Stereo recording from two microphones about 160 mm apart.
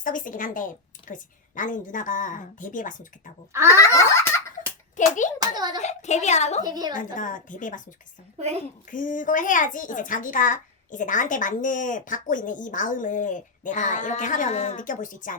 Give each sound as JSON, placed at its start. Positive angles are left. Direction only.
{"t": 0.0, "sound": "a child's voice", "side_deg": 55}
{"t": 3.5, "sound": "a sound", "side_deg": -15}
{"t": 3.8, "sound": "a sound", "side_deg": 20}
{"t": 4.9, "sound": "a woman's voice", "side_deg": 50}
{"t": 5.4, "sound": "a child's voice", "side_deg": -25}
{"t": 5.8, "sound": "a woman's voice", "side_deg": 45}
{"t": 6.6, "sound": "a child's voice", "side_deg": -25}
{"t": 6.9, "sound": "a child's voice", "side_deg": 55}
{"t": 8.9, "sound": "a child's voice", "side_deg": 55}